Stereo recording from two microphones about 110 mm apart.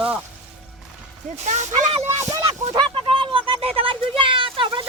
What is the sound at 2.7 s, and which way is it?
A child's voice, 50° right (ahead or behind).